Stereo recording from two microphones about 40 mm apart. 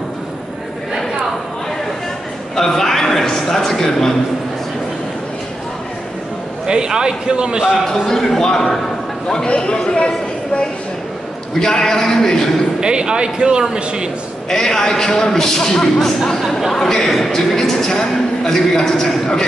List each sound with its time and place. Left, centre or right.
2.5 s a sound: centre
6.7 s a man's voice: centre
8.1 s a man's voice: centre
11.6 s a man's voice: centre
12.8 s a man's voice: right
14.5 s a man's voice: centre
16.3 s a man's voice: centre